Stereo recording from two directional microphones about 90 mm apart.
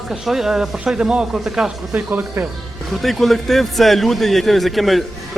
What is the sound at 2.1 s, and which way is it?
Speech, 25° right (ahead or behind).